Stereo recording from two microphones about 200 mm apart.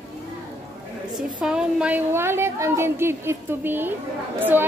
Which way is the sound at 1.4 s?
5° right (ahead or behind).